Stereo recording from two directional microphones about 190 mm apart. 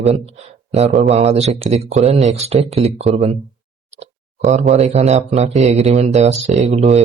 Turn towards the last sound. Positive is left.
turn(degrees=-35)  # may be behind; listen again after turning